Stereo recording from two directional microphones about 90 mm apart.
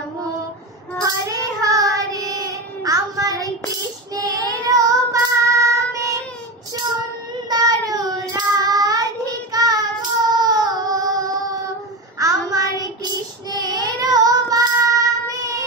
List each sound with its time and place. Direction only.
1.6 s child singing: 40° right (ahead or behind)
7.4 s child singing: 45° right (ahead or behind)